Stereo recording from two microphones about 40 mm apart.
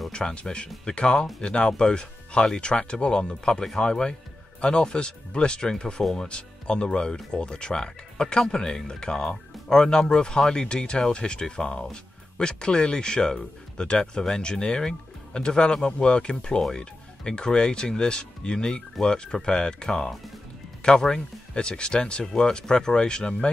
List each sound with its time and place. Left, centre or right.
0.1 s speech: left